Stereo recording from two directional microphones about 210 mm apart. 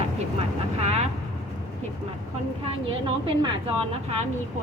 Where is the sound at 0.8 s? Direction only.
30° right (ahead or behind).